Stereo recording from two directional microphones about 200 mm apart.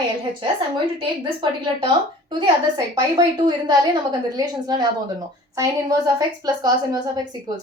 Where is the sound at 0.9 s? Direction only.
25° right (ahead or behind).